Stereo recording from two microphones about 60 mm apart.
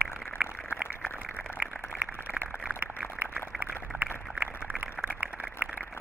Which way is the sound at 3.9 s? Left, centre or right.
Right.